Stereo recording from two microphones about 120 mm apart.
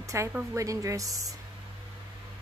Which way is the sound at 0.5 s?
25° right (ahead or behind).